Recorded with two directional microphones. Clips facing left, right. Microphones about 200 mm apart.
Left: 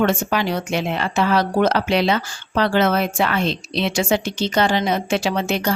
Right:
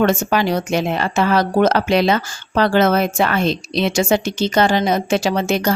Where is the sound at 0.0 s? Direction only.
40° right (ahead or behind).